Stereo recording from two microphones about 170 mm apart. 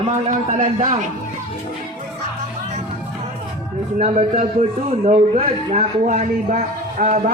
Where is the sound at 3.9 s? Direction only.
45° right (ahead or behind).